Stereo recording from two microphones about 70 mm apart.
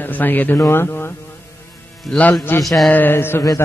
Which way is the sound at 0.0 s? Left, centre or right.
Left.